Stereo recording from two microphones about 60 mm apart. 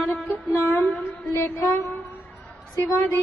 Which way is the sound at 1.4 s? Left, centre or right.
Left.